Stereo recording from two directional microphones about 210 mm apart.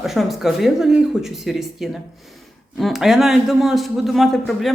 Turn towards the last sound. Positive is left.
turn(degrees=0)  # may be behind; listen again after turning